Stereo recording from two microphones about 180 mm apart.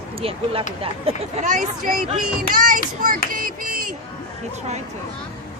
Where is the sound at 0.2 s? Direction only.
30° right (ahead or behind); by 3.9 s 50° right (ahead or behind).